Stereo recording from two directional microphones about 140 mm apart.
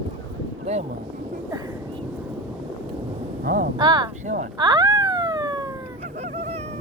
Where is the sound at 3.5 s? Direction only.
90° right.